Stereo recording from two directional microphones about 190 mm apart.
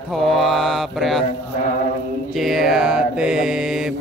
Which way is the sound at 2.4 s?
Centre (ahead or behind).